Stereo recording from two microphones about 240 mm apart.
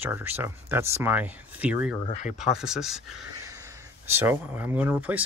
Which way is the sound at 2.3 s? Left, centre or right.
Centre.